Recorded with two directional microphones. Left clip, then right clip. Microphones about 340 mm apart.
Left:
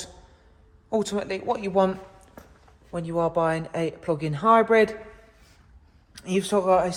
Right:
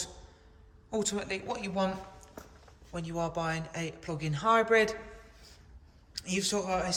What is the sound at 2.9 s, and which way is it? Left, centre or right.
Speech, left.